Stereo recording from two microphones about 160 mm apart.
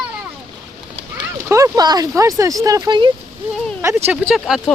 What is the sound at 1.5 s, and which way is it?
Speech, 20° right (ahead or behind).